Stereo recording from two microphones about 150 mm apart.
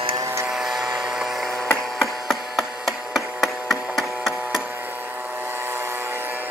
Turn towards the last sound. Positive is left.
turn(degrees=-15)  # may be behind; listen again after turning